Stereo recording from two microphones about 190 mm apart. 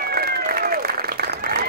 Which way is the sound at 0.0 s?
55° right (ahead or behind).